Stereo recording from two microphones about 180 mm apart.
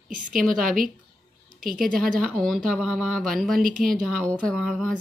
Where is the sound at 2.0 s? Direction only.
5° left (ahead or behind).